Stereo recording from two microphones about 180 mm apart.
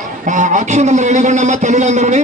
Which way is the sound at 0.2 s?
45° right (ahead or behind).